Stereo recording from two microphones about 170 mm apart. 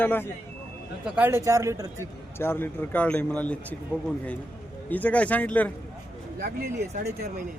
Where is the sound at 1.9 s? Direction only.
15° left (ahead or behind).